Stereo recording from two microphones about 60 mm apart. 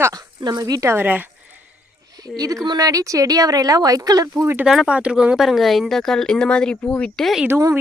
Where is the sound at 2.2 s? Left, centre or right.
Right.